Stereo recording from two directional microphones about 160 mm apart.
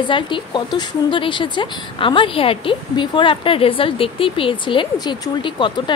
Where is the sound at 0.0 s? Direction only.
30° left (ahead or behind).